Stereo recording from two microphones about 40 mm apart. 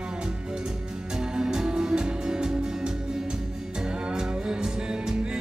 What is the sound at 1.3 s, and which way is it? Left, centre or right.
Music, centre.